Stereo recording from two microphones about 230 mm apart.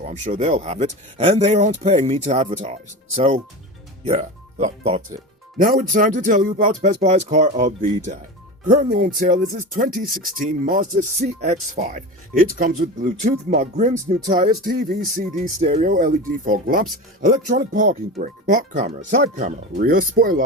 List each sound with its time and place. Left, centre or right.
0.0 s speech: right
5.5 s music: right